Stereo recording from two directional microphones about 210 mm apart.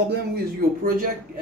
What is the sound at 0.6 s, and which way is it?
Speech, 45° right (ahead or behind).